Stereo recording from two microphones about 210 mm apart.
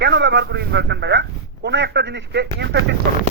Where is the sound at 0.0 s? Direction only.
55° right (ahead or behind).